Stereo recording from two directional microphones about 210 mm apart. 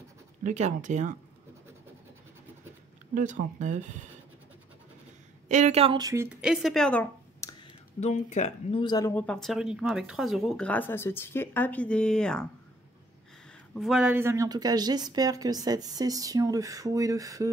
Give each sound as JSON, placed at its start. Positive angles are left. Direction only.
{"t": 0.4, "sound": "speech", "side_deg": -35}
{"t": 3.2, "sound": "speech", "side_deg": -35}
{"t": 5.5, "sound": "speech", "side_deg": -35}
{"t": 8.0, "sound": "speech", "side_deg": 35}
{"t": 9.1, "sound": "speech", "side_deg": 5}
{"t": 13.7, "sound": "speech", "side_deg": 0}